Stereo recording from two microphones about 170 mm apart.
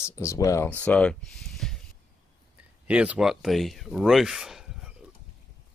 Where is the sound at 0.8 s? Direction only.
5° left (ahead or behind).